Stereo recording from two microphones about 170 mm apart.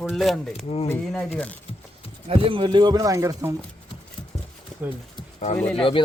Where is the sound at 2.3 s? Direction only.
35° right (ahead or behind).